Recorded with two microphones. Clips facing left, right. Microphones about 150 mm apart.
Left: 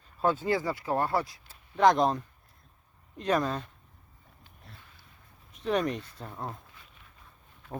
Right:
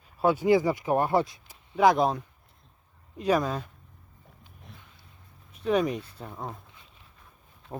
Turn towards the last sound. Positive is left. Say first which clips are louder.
# right 1 dB
turn(degrees=-5)  # may be behind; listen again after turning